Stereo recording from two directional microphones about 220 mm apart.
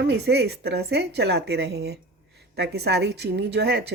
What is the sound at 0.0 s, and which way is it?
Speech, 50° right (ahead or behind).